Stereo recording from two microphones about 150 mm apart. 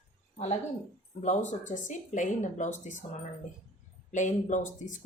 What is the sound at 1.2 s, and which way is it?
Speech, 55° left (ahead or behind).